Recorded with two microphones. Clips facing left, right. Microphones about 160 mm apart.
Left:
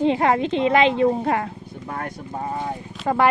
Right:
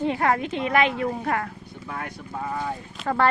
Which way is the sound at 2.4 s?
25° left (ahead or behind).